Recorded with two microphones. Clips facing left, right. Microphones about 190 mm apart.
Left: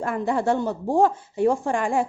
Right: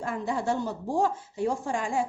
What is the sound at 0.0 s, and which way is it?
Speech, 60° left (ahead or behind).